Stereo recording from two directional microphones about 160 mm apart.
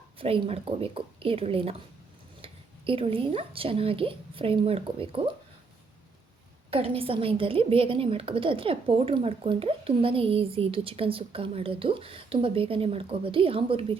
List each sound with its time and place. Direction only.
0.2 s a woman's voice: 35° right (ahead or behind)
6.7 s a woman's voice: 35° right (ahead or behind)